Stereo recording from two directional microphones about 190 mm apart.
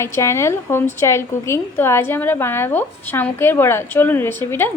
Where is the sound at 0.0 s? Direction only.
15° left (ahead or behind).